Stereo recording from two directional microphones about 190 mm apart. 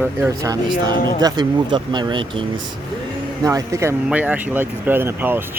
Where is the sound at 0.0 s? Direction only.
10° right (ahead or behind).